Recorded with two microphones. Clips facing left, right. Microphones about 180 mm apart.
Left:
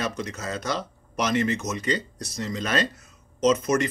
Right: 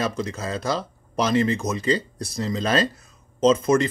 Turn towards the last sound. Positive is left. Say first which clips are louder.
# right 3 dB
turn(degrees=-30)  # may be behind; listen again after turning